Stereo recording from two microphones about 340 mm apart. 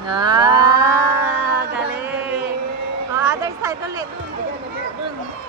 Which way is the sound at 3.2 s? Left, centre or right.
Centre.